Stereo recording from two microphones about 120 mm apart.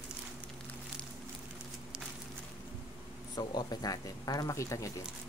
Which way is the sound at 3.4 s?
35° left (ahead or behind).